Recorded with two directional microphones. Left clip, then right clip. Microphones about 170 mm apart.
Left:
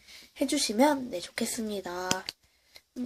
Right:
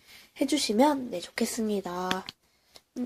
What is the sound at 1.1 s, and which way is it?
Speech, 55° right (ahead or behind).